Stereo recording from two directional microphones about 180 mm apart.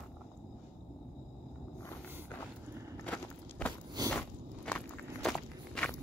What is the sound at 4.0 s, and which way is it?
Biting, 20° right (ahead or behind).